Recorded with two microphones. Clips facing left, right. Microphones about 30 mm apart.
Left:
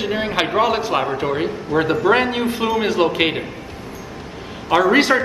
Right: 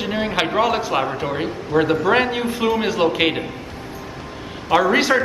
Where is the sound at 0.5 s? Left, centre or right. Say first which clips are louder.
Left 1 dB; centre.